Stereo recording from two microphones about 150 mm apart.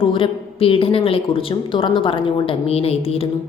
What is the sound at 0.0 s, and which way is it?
Speech, 40° left (ahead or behind).